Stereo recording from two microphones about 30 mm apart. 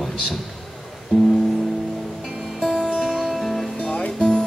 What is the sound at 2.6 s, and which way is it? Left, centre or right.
Music, left.